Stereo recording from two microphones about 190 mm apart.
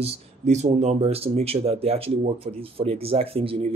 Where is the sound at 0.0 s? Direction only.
35° right (ahead or behind).